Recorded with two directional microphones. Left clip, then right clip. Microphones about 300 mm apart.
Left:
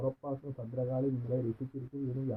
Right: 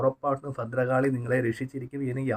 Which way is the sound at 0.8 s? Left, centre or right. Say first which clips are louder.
Right 10 dB; right.